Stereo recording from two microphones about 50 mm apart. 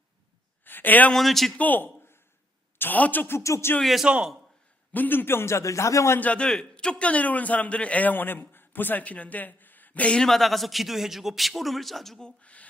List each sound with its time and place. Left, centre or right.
0.6 s a sound: left
1.1 s a man's voice: centre
1.5 s a man's voice: left
3.3 s music: left
4.0 s a man's voice: centre
4.9 s speech: left
6.1 s a man's voice: left
10.2 s a man's voice: centre
12.2 s speech: left